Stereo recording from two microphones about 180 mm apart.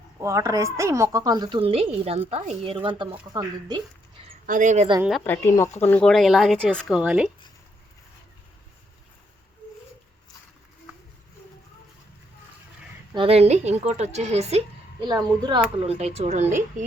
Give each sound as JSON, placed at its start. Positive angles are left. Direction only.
{"t": 0.2, "sound": "a woman's voice", "side_deg": -15}
{"t": 4.4, "sound": "speech", "side_deg": -45}
{"t": 5.2, "sound": "speech", "side_deg": 10}
{"t": 13.1, "sound": "a woman's voice", "side_deg": -35}
{"t": 15.0, "sound": "a woman's voice", "side_deg": -25}